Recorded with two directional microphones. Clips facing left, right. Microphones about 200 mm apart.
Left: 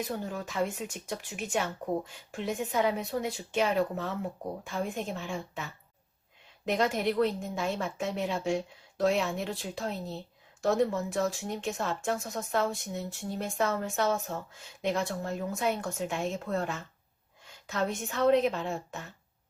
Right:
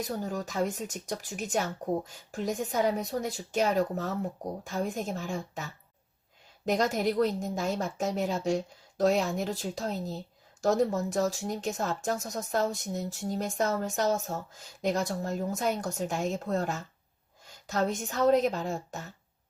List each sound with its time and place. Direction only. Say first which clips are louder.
0.0 s a woman's voice: right 1 dB; 40° right (ahead or behind)
6.7 s a woman's voice: right 1 dB; 40° right (ahead or behind)